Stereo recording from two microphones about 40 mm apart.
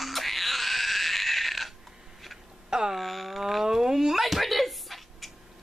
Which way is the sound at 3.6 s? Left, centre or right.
Centre.